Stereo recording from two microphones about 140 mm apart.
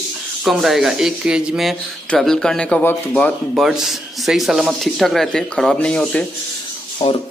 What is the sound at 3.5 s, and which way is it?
Speech, centre (ahead or behind).